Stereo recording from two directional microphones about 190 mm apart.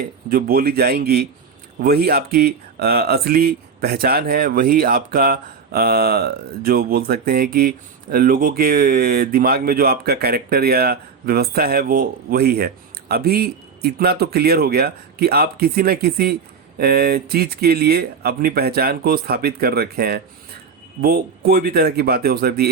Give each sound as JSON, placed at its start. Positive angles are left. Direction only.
{"t": 0.0, "sound": "speech", "side_deg": -50}